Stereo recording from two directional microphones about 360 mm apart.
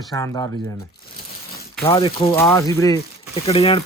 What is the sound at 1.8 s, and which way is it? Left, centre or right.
Speech, centre.